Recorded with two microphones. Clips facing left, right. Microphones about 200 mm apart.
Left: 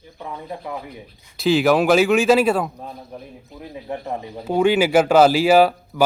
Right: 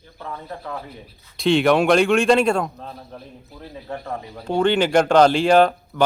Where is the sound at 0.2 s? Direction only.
15° left (ahead or behind).